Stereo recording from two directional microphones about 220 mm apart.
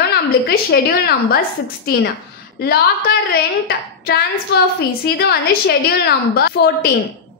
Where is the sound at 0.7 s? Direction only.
45° left (ahead or behind).